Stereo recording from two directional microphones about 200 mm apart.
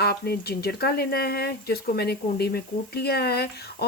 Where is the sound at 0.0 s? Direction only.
50° left (ahead or behind).